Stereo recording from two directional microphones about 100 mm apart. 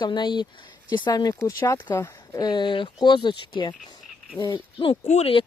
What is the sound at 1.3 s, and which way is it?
Speech, 30° left (ahead or behind).